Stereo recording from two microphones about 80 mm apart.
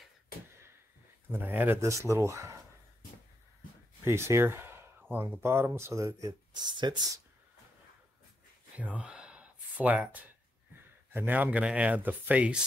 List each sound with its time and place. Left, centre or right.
1.5 s speech: right
1.8 s speech: right
4.0 s speech: right
6.5 s speech: right
8.7 s a sound: centre
11.1 s speech: right